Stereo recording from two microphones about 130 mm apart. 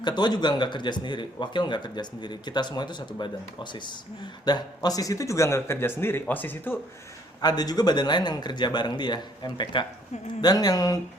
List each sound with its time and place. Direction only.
0.0 s speech: 35° left (ahead or behind); by 6.7 s 15° left (ahead or behind)
7.4 s speech: 30° left (ahead or behind)